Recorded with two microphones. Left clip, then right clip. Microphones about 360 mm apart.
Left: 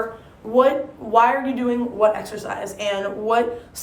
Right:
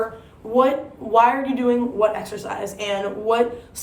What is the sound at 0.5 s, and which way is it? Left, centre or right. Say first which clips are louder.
Speech: left 1 dB; centre.